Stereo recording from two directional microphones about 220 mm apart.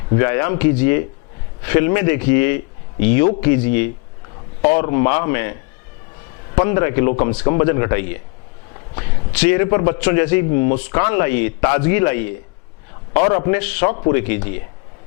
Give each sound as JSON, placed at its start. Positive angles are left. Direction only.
{"t": 0.1, "sound": "a man's voice", "side_deg": 15}
{"t": 6.6, "sound": "a man's voice", "side_deg": 20}